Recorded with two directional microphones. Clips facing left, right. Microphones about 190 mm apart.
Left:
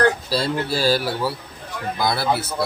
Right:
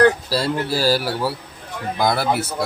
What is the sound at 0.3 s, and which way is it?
Speech, 10° right (ahead or behind).